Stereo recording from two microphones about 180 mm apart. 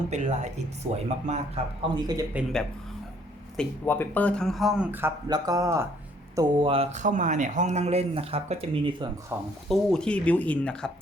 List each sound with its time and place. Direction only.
0.1 s a man's voice: 40° right (ahead or behind)
2.0 s speech: 20° right (ahead or behind)
2.3 s a man's voice: centre (ahead or behind); by 9.0 s 30° right (ahead or behind)
9.3 s speech: 15° right (ahead or behind)
9.6 s speech: 5° left (ahead or behind)